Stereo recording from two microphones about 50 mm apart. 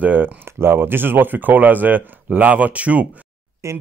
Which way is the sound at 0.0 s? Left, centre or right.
Right.